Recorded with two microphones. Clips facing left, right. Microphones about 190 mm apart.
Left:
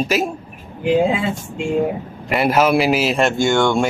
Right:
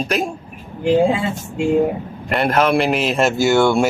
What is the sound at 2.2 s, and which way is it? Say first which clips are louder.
A man's voice: left 1 dB; 5° left (ahead or behind).